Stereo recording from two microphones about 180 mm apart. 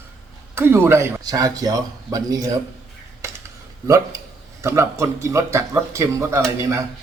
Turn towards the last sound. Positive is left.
turn(degrees=-15)  # may be behind; listen again after turning